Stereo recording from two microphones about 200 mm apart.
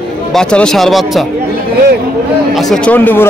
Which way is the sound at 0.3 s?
5° left (ahead or behind).